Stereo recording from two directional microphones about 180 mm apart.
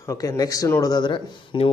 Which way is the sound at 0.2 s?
20° left (ahead or behind).